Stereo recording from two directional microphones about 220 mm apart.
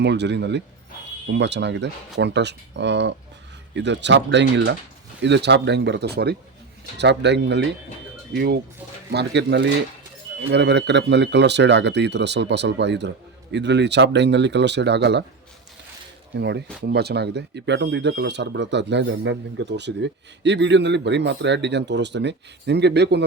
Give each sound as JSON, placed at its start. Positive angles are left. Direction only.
{"t": 0.0, "sound": "speech", "side_deg": -50}
{"t": 16.4, "sound": "speech", "side_deg": -50}